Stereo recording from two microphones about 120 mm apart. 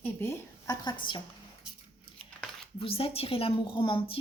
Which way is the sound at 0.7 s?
40° left (ahead or behind).